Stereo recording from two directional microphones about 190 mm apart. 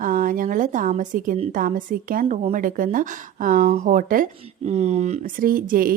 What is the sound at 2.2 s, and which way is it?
A woman's voice, 35° right (ahead or behind).